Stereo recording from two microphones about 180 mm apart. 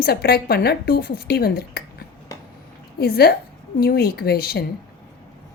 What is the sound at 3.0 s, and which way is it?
A woman's voice, 60° left (ahead or behind).